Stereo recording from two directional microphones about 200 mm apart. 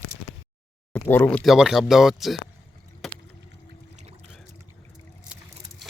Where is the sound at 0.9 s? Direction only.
10° left (ahead or behind).